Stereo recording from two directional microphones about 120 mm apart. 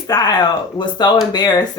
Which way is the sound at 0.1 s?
35° left (ahead or behind).